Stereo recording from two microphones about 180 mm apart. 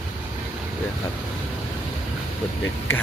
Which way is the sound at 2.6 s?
10° left (ahead or behind).